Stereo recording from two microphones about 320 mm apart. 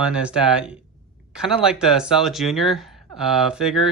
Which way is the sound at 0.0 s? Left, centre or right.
Centre.